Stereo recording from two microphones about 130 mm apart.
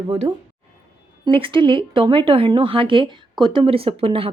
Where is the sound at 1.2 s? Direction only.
40° right (ahead or behind).